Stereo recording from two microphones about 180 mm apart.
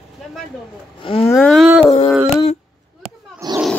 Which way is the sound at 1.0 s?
30° left (ahead or behind).